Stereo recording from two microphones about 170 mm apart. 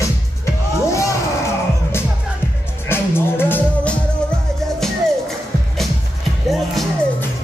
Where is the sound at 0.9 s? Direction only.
15° left (ahead or behind).